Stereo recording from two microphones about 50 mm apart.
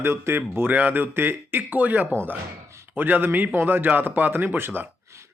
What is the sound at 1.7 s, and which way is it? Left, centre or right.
Speech, right.